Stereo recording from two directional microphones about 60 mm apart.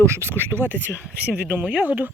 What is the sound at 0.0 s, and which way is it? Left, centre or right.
Speech, right.